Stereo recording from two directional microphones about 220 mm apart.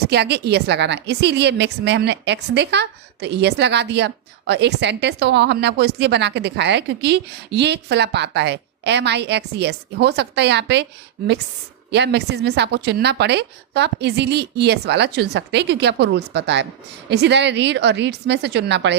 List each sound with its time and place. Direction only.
0.1 s a woman's voice: 50° right (ahead or behind)
11.9 s a woman's voice: 50° right (ahead or behind)